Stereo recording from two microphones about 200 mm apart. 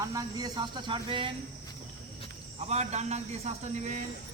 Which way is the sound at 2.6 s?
35° right (ahead or behind).